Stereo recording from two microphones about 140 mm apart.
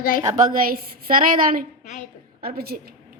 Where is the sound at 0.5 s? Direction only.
90° right.